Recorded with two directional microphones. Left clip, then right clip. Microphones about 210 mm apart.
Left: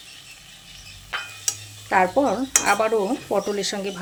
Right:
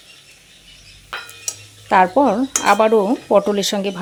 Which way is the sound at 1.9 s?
45° right (ahead or behind).